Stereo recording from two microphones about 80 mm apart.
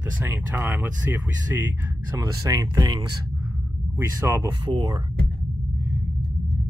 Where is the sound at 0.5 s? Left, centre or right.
Right.